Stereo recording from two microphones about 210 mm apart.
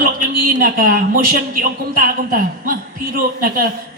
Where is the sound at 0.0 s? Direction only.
40° right (ahead or behind).